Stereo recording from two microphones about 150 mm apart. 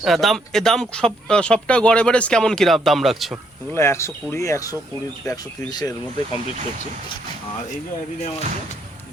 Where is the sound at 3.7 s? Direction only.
15° left (ahead or behind).